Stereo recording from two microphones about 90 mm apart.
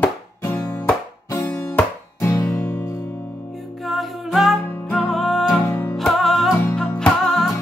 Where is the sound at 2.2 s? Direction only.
40° left (ahead or behind).